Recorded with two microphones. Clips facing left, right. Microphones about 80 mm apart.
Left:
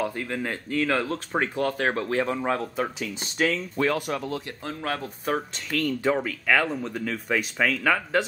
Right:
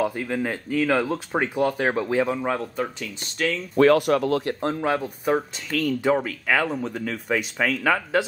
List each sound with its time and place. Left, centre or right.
0.0 s speech: centre
3.7 s speech: right
5.0 s speech: centre